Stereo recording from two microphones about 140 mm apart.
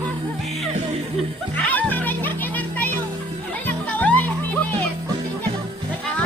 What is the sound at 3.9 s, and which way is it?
Music, 10° left (ahead or behind).